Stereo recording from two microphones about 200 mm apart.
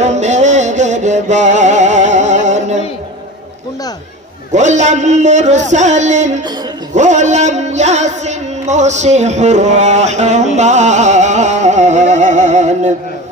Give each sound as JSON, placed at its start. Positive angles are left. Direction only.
{"t": 0.0, "sound": "music", "side_deg": -35}
{"t": 4.5, "sound": "a sound", "side_deg": -35}
{"t": 6.9, "sound": "music", "side_deg": -35}